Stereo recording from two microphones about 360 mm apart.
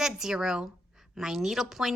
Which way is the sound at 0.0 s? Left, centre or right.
Centre.